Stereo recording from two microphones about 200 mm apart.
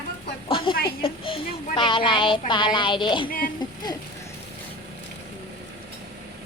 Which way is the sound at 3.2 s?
45° left (ahead or behind).